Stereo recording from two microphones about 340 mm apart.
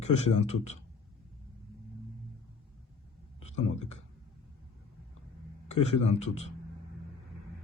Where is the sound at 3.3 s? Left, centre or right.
Centre.